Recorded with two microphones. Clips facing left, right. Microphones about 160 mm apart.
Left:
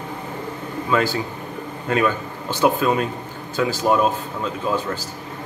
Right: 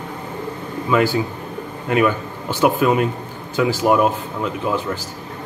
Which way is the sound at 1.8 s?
15° right (ahead or behind).